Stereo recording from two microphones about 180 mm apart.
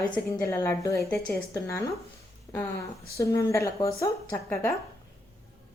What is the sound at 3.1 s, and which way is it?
A woman's voice, 15° left (ahead or behind).